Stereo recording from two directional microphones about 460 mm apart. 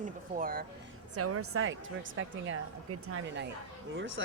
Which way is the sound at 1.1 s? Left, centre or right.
Right.